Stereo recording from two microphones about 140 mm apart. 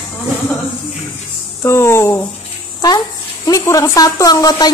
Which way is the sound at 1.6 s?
20° left (ahead or behind).